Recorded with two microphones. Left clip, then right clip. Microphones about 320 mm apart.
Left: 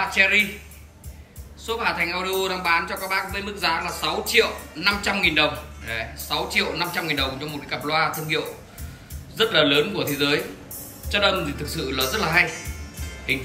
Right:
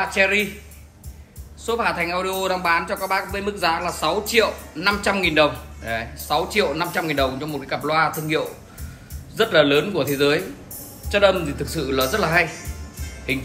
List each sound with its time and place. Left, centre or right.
0.0 s speech: centre
1.7 s speech: centre